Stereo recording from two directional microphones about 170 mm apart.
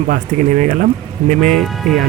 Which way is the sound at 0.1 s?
45° right (ahead or behind).